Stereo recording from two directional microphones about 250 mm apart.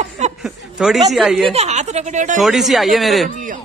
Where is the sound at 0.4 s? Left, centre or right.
Centre.